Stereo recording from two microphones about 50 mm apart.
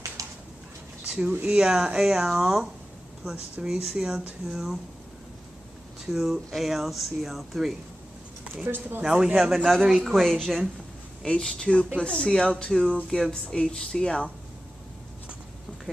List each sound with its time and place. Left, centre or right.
0.2 s a sound: right
1.0 s a sound: right
1.5 s speech: centre
3.6 s speech: centre
6.1 s speech: centre
8.6 s speech: right
9.0 s speech: centre
11.2 s speech: centre